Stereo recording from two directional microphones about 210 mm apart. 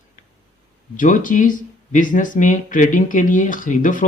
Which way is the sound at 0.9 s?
40° left (ahead or behind).